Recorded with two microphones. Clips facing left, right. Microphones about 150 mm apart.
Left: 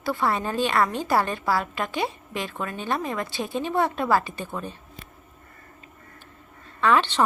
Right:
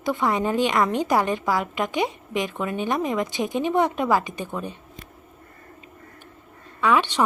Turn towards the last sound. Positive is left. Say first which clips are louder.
# even
turn(degrees=-10)  # may be behind; listen again after turning